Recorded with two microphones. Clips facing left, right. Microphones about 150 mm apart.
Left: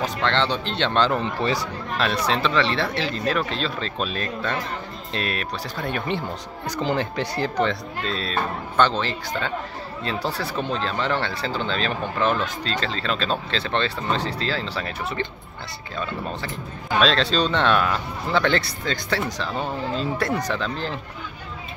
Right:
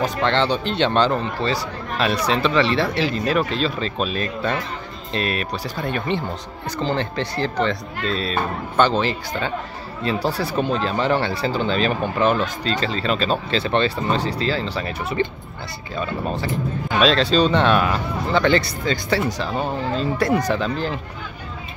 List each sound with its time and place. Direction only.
0.0 s speech: 5° right (ahead or behind)
1.2 s speech: 15° left (ahead or behind)
2.2 s speech: 5° right (ahead or behind)